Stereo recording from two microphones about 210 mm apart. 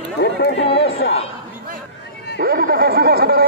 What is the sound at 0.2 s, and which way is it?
Chatter, 55° left (ahead or behind).